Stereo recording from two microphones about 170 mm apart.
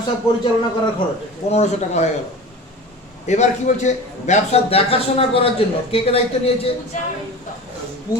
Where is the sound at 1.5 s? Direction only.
40° left (ahead or behind).